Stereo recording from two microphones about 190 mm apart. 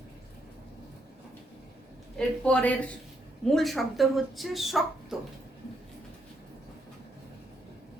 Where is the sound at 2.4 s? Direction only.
5° left (ahead or behind).